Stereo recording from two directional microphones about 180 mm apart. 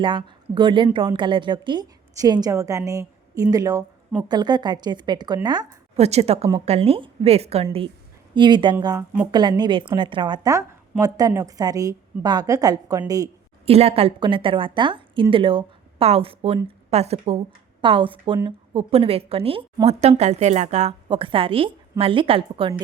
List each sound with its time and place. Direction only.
0.0 s a woman's voice: 25° right (ahead or behind)
5.6 s a woman's voice: 35° right (ahead or behind); by 13.3 s 20° right (ahead or behind)
13.7 s a woman's voice: 35° right (ahead or behind)